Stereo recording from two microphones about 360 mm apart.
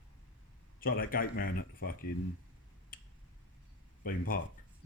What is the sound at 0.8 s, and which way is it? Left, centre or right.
Speech, left.